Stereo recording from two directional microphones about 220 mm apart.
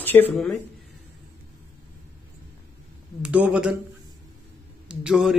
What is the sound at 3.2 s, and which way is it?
Speech, 5° right (ahead or behind).